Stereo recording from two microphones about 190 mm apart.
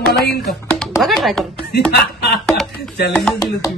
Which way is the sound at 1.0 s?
Centre (ahead or behind).